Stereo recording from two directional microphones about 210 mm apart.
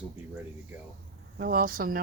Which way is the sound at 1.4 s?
45° right (ahead or behind).